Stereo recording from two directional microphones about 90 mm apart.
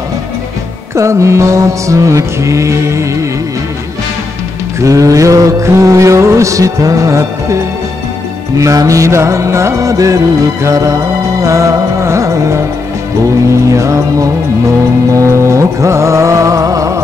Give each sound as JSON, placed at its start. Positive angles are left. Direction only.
{"t": 0.9, "sound": "music", "side_deg": -35}
{"t": 4.7, "sound": "music", "side_deg": -35}
{"t": 8.5, "sound": "music", "side_deg": -35}